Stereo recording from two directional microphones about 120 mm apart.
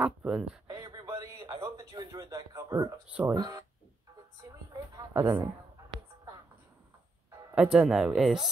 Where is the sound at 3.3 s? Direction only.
35° right (ahead or behind).